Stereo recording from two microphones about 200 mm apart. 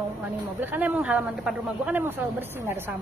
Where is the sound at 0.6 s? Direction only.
10° right (ahead or behind).